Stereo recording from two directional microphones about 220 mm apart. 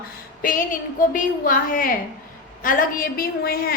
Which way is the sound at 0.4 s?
35° left (ahead or behind).